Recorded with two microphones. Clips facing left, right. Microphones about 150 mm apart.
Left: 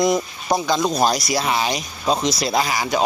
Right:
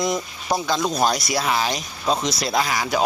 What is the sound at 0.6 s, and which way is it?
Speech, centre (ahead or behind).